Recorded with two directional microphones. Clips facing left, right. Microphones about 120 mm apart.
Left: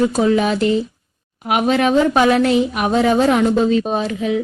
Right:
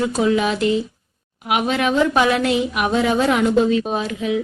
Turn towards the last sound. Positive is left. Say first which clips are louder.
# left 2 dB
turn(degrees=35)  # may be behind; listen again after turning